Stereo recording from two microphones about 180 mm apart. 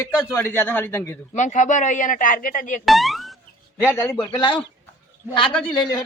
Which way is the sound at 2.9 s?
Centre (ahead or behind).